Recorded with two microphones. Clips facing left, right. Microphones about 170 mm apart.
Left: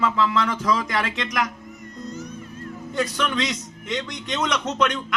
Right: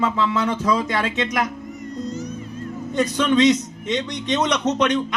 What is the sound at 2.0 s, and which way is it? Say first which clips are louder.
Music: right 3 dB; 55° left (ahead or behind).